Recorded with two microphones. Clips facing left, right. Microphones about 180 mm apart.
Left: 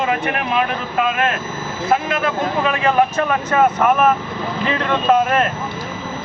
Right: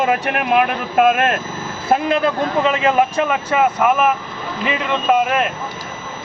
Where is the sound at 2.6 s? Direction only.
15° right (ahead or behind).